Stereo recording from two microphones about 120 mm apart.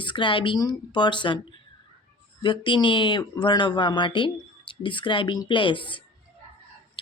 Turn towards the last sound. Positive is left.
turn(degrees=45)  # may be behind; listen again after turning